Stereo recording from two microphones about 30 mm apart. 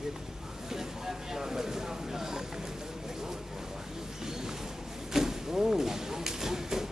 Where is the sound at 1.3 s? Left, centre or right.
Centre.